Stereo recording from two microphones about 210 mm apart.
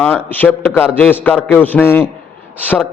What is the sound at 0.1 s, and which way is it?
A man's voice, 10° left (ahead or behind).